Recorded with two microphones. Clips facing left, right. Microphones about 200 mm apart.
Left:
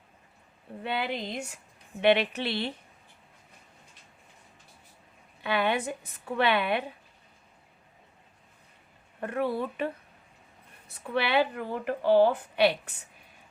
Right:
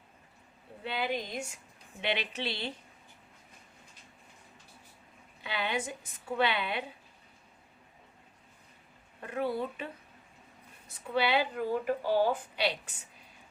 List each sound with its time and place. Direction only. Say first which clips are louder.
0.8 s a woman's voice: left 2 dB; 60° left (ahead or behind)
5.4 s a woman's voice: left 7 dB; 60° left (ahead or behind)
9.2 s a woman's voice: left 3 dB; 60° left (ahead or behind)